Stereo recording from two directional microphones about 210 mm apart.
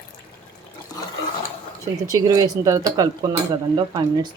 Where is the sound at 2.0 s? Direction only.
15° right (ahead or behind).